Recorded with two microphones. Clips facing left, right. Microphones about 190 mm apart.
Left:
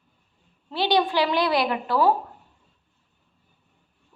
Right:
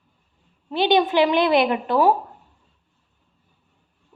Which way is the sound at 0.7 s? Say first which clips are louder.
Right 4 dB; 20° right (ahead or behind).